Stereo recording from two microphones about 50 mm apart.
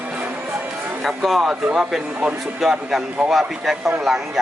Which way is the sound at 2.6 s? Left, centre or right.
Centre.